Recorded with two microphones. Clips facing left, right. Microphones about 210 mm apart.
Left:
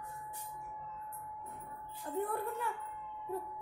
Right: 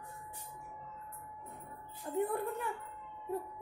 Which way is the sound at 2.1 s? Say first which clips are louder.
Right 3 dB; 20° right (ahead or behind).